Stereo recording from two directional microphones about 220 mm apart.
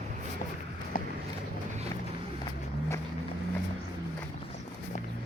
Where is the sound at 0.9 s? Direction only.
40° left (ahead or behind).